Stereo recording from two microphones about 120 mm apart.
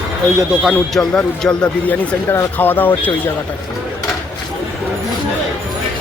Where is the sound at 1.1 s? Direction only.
10° left (ahead or behind).